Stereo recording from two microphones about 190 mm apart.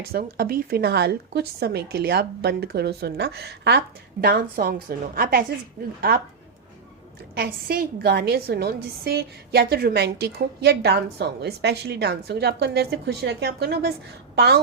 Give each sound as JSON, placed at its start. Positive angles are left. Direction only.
{"t": 0.1, "sound": "a woman's voice", "side_deg": -55}
{"t": 7.3, "sound": "a woman's voice", "side_deg": -55}